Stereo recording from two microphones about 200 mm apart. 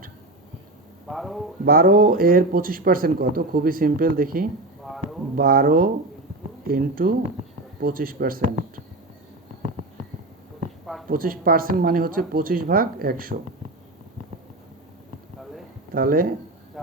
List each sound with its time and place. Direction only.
1.1 s a man's voice: centre (ahead or behind)
1.6 s speech: 45° right (ahead or behind)
4.8 s a sound: centre (ahead or behind)
5.4 s speech: 45° right (ahead or behind)
11.1 s speech: 45° right (ahead or behind)
16.0 s speech: 45° right (ahead or behind)
16.8 s vehicle: centre (ahead or behind)